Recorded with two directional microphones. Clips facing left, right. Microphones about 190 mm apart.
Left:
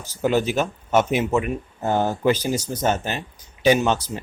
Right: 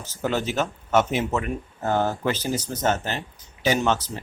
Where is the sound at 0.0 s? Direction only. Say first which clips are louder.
Left 5 dB; 10° left (ahead or behind).